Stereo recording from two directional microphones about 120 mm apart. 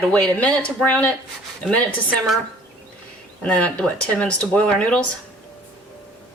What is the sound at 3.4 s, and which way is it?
A woman's voice, 10° left (ahead or behind).